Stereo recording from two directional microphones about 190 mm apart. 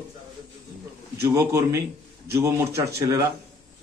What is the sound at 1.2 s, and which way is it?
A man's voice, 15° right (ahead or behind).